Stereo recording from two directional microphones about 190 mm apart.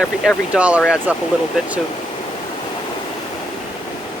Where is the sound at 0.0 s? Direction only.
5° right (ahead or behind).